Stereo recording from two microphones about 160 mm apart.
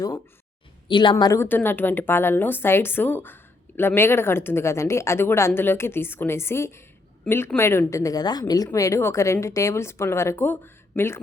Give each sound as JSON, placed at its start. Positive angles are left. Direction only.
{"t": 0.9, "sound": "a woman's voice", "side_deg": 30}
{"t": 1.1, "sound": "a woman's voice", "side_deg": 20}